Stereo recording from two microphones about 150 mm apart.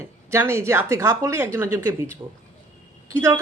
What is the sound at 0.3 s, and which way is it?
A woman's voice, 15° right (ahead or behind).